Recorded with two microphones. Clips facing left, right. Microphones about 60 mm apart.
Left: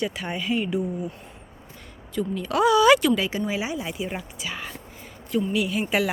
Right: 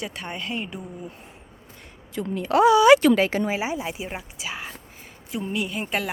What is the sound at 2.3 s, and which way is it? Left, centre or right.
Speech, right.